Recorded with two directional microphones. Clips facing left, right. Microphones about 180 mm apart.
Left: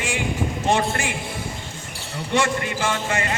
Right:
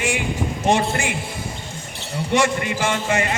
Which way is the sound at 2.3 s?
15° right (ahead or behind).